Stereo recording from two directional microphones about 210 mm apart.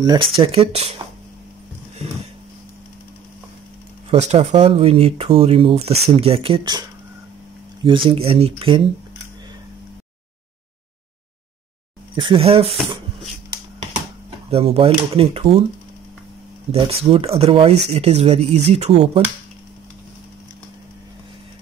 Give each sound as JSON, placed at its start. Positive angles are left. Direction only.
{"t": 0.0, "sound": "speech", "side_deg": -20}
{"t": 4.1, "sound": "speech", "side_deg": -30}
{"t": 7.8, "sound": "speech", "side_deg": -25}
{"t": 12.2, "sound": "speech", "side_deg": -25}
{"t": 14.5, "sound": "speech", "side_deg": -30}
{"t": 16.7, "sound": "speech", "side_deg": -25}